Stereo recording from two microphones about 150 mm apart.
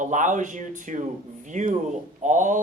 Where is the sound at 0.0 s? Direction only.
55° right (ahead or behind).